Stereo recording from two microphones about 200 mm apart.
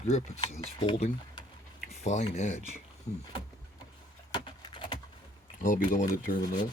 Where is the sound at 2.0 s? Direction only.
35° left (ahead or behind).